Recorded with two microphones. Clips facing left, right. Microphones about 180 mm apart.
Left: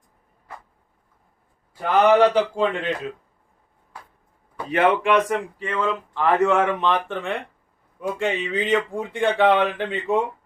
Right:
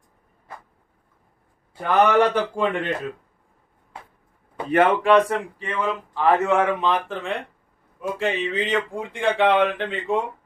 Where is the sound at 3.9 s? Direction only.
25° right (ahead or behind).